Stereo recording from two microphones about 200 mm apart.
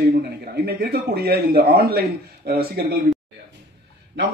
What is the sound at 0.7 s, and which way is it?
A man's voice, 50° right (ahead or behind).